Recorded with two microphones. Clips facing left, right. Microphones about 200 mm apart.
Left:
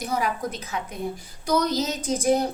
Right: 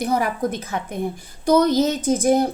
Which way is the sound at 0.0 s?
55° right (ahead or behind).